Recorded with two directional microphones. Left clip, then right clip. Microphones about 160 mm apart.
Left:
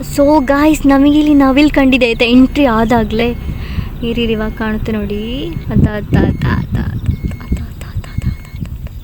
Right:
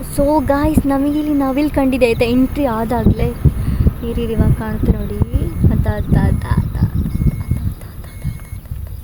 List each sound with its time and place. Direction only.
0.0 s speech: 15° left (ahead or behind)